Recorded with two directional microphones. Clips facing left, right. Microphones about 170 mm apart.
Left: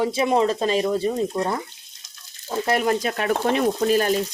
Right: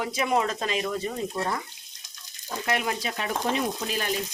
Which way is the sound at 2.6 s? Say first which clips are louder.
Left 7 dB; 40° left (ahead or behind).